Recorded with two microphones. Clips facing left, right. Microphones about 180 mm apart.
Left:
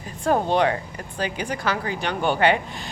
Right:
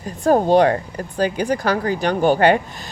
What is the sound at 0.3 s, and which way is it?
Speech, 40° right (ahead or behind).